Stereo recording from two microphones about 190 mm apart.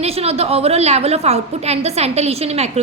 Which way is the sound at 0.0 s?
30° right (ahead or behind).